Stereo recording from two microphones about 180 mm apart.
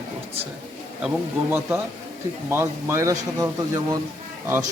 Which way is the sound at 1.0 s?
10° right (ahead or behind).